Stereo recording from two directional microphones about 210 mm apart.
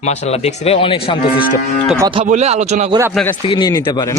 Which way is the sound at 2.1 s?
30° right (ahead or behind).